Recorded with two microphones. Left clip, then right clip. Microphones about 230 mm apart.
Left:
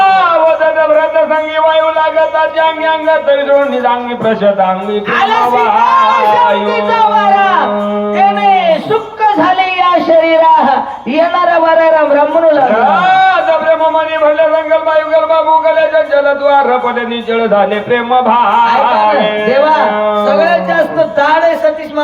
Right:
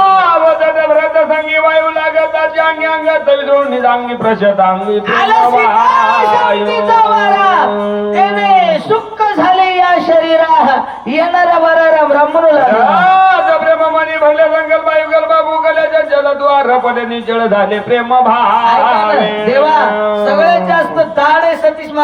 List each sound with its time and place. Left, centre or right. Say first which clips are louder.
5.1 s music: right 1 dB; right
7.0 s speech: left 4 dB; right
8.7 s a sound: even; right
17.9 s music: even; right